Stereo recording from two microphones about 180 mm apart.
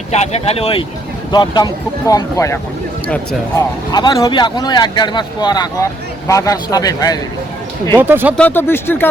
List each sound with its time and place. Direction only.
0.1 s speech: 35° left (ahead or behind); by 2.6 s 15° left (ahead or behind)
3.9 s speech: 20° left (ahead or behind)
7.9 s speech: 10° right (ahead or behind)
8.4 s speech: 10° left (ahead or behind)